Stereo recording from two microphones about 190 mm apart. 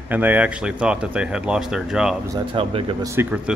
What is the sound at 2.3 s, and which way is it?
Speech, 30° right (ahead or behind).